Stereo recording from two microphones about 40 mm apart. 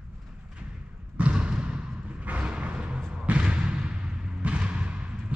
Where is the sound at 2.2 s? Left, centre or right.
Right.